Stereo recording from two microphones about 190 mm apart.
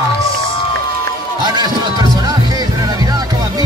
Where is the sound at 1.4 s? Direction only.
20° right (ahead or behind).